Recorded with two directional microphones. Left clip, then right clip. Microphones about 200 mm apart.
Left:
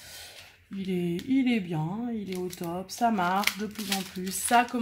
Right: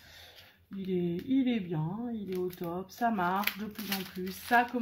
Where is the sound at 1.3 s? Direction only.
30° left (ahead or behind).